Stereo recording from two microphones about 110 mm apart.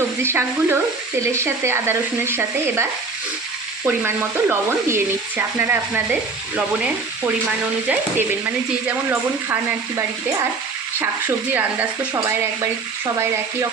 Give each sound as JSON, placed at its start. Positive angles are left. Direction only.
{"t": 0.2, "sound": "speech", "side_deg": -25}
{"t": 3.8, "sound": "speech", "side_deg": -15}
{"t": 8.9, "sound": "speech", "side_deg": -20}